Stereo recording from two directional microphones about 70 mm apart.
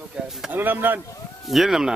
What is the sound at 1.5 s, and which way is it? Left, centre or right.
Speech, centre.